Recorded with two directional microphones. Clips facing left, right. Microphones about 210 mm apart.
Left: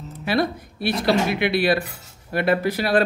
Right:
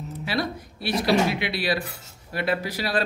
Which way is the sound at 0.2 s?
55° left (ahead or behind).